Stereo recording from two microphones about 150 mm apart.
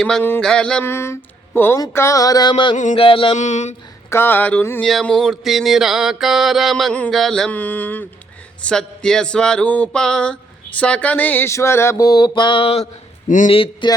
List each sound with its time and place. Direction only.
0.0 s speech: 10° left (ahead or behind)
1.8 s mantra: 20° left (ahead or behind)
2.9 s a sound: 35° left (ahead or behind)
3.3 s speech: 50° left (ahead or behind)
4.1 s speech: 15° left (ahead or behind)
4.8 s a sound: 5° left (ahead or behind)
10.8 s mantra: 10° left (ahead or behind); by 12.9 s 40° left (ahead or behind)
13.2 s speech: 60° left (ahead or behind)
13.5 s a sound: 35° left (ahead or behind)